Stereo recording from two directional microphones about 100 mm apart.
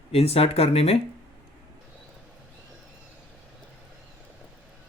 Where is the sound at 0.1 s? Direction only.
80° left.